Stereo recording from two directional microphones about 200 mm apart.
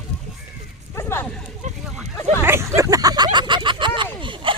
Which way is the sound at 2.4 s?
10° right (ahead or behind).